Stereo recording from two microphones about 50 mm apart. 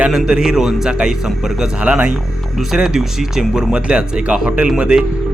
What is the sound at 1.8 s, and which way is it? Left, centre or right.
Speech, right.